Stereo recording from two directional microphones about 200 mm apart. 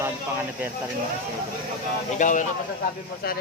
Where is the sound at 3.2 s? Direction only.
50° left (ahead or behind).